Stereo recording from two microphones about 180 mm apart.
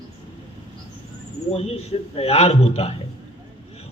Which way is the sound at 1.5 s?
35° left (ahead or behind).